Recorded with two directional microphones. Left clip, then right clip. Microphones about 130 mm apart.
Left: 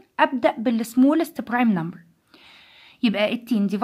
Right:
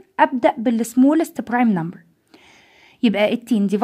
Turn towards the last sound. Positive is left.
turn(degrees=-45)  # may be behind; listen again after turning